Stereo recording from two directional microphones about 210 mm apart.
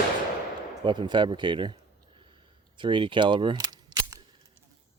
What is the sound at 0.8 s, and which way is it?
Speech, 20° right (ahead or behind).